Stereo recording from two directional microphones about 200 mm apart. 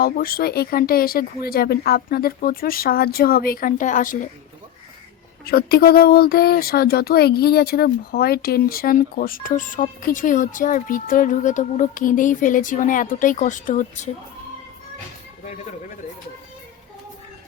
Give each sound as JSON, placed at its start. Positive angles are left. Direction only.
{"t": 0.0, "sound": "speech", "side_deg": 50}
{"t": 5.5, "sound": "speech", "side_deg": 50}